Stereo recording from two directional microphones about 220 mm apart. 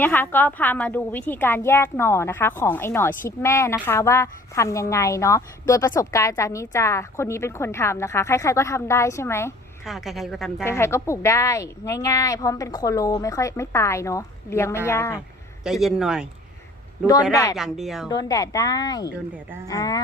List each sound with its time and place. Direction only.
0.0 s a woman's voice: 10° left (ahead or behind)
9.8 s a woman's voice: centre (ahead or behind)
10.6 s a woman's voice: 10° left (ahead or behind)
15.6 s a woman's voice: centre (ahead or behind)
17.3 s a woman's voice: 15° left (ahead or behind)
17.6 s a woman's voice: centre (ahead or behind)
18.1 s a woman's voice: 15° left (ahead or behind)